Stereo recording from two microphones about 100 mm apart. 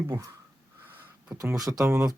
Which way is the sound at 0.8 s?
20° right (ahead or behind).